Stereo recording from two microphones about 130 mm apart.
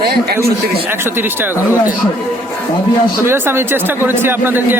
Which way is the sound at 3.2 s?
15° right (ahead or behind).